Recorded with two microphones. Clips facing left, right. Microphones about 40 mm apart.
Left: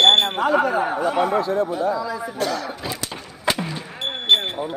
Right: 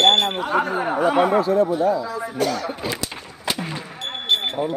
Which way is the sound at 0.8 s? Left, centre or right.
Centre.